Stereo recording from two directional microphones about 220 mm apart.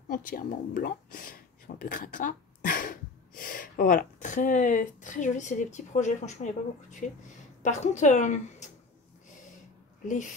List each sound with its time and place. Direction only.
0.1 s speech: 40° left (ahead or behind)
10.0 s speech: 35° left (ahead or behind)